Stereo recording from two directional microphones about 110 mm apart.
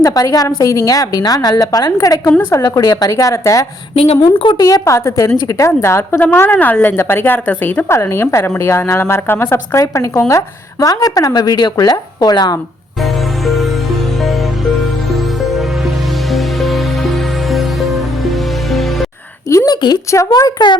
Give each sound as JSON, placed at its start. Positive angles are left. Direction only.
{"t": 0.0, "sound": "a woman's voice", "side_deg": 30}
{"t": 4.2, "sound": "a woman's voice", "side_deg": 50}
{"t": 4.6, "sound": "a woman's voice", "side_deg": 30}
{"t": 13.4, "sound": "music", "side_deg": 0}
{"t": 15.1, "sound": "music", "side_deg": 0}
{"t": 19.5, "sound": "a sound", "side_deg": 30}
{"t": 20.1, "sound": "a woman's voice", "side_deg": 30}